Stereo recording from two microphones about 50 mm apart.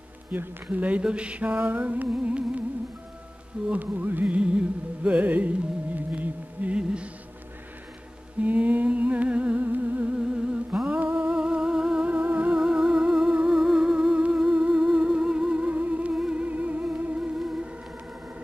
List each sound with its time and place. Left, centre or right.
0.3 s mantra: right
2.2 s music: right
3.7 s music: right
6.8 s music: right
8.4 s humming: right
10.1 s music: centre
10.9 s music: right
11.1 s music: centre
12.1 s music: right
12.5 s music: centre
15.7 s music: right
16.2 s music: centre
16.4 s music: right
17.1 s music: centre